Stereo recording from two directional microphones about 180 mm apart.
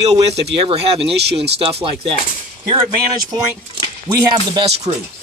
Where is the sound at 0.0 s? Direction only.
35° right (ahead or behind).